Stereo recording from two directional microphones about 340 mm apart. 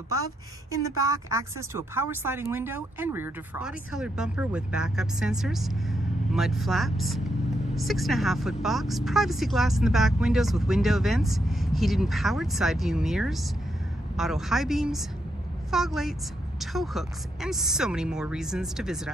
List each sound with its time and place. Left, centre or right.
0.7 s speech: centre